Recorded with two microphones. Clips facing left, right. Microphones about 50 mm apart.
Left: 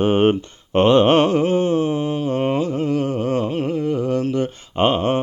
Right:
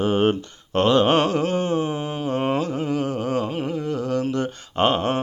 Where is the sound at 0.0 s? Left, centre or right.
Left.